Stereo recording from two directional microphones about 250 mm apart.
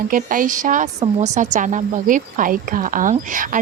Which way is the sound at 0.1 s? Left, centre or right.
Right.